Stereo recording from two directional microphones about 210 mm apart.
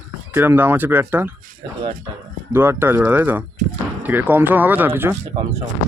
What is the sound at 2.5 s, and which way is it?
Speech, 10° right (ahead or behind).